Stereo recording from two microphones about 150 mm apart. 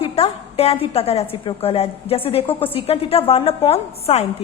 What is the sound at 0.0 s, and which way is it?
A woman's voice, 40° left (ahead or behind).